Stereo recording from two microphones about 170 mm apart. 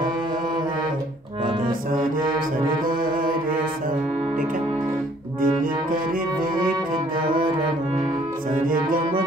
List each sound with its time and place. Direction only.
5.4 s music: 55° right (ahead or behind)
8.6 s music: 55° right (ahead or behind)